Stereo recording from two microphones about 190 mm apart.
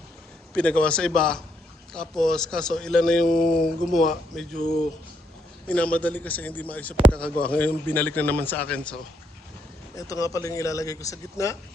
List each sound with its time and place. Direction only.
0.5 s a man's voice: 5° left (ahead or behind)
5.6 s a man's voice: 5° left (ahead or behind)
9.9 s speech: 15° left (ahead or behind)